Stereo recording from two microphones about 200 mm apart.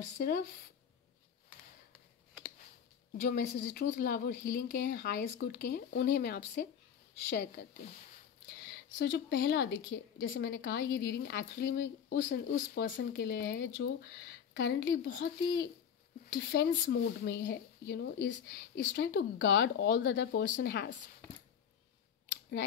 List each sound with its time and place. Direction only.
0.2 s speech: 50° left (ahead or behind)
3.3 s a woman's voice: 40° left (ahead or behind); by 15.5 s 60° left (ahead or behind)
16.3 s speech: 45° left (ahead or behind)
16.9 s a woman's voice: 60° left (ahead or behind)